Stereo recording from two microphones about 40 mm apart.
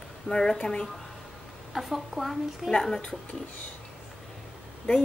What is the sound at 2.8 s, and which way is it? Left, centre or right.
Speech, centre.